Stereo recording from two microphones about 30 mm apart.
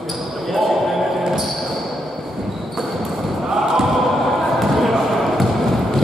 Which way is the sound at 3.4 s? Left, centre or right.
Centre.